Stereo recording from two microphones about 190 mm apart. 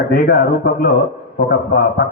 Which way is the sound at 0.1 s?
50° left (ahead or behind).